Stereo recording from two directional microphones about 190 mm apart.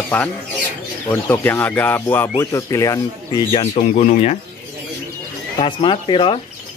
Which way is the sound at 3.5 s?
35° left (ahead or behind).